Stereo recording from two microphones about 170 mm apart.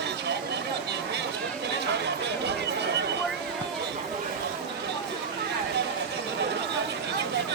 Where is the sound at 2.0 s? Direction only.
90° right.